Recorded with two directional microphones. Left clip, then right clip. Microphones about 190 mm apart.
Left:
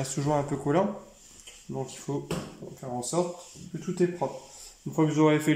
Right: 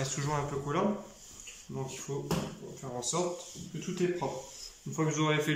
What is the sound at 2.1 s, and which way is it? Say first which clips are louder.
Speech: left 5 dB; 35° left (ahead or behind).